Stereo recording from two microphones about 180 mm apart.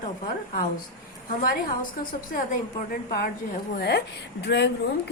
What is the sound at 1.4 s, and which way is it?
A woman's voice, 50° left (ahead or behind).